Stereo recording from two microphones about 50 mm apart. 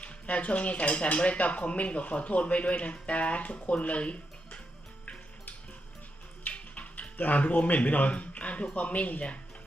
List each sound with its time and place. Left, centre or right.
0.0 s speech: left
6.4 s speech: left